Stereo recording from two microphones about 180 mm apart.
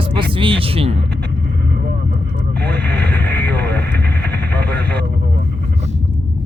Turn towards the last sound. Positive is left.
turn(degrees=10)  # may be behind; listen again after turning